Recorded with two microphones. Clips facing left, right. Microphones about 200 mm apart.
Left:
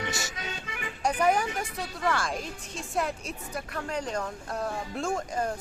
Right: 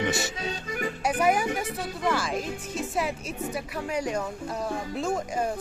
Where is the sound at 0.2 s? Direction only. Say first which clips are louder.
Right 6 dB; 30° right (ahead or behind).